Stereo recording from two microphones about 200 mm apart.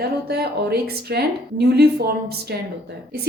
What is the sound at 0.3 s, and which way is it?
Speech, 50° right (ahead or behind).